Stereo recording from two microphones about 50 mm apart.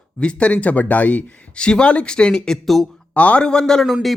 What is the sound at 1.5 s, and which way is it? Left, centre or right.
Speech, centre.